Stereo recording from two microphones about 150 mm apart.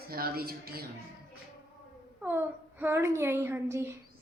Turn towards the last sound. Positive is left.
turn(degrees=-15)  # may be behind; listen again after turning